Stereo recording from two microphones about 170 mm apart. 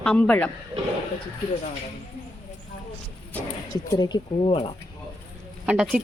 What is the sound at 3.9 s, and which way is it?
Speech, 25° left (ahead or behind).